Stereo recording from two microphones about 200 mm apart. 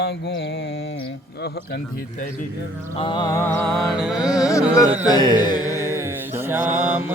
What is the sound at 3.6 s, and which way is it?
Music, centre (ahead or behind).